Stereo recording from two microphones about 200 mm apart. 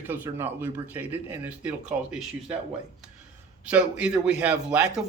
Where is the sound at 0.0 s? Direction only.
10° right (ahead or behind).